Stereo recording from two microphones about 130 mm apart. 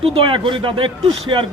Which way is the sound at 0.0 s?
45° right (ahead or behind).